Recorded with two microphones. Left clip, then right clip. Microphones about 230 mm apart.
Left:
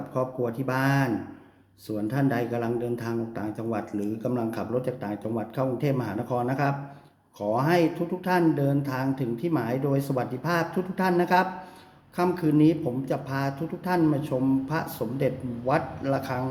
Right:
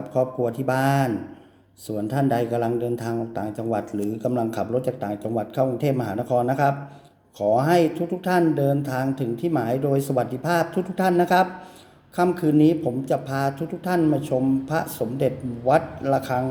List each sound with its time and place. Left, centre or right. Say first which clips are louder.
0.1 s a man's voice: right 6 dB; centre